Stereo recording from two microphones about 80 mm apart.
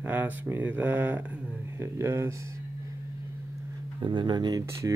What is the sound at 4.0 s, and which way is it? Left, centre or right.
Speech, right.